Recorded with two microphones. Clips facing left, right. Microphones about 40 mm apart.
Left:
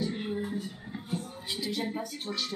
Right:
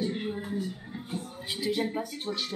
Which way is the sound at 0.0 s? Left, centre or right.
Right.